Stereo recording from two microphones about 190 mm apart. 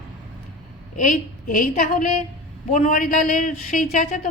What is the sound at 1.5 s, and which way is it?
A man's voice, 45° left (ahead or behind).